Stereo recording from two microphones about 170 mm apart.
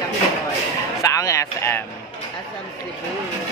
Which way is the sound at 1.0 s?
20° left (ahead or behind).